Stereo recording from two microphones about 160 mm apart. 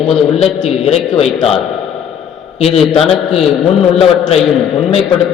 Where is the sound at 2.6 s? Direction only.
40° left (ahead or behind).